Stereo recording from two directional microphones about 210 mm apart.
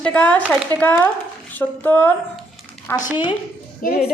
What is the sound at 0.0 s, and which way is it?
A woman's voice, 5° left (ahead or behind).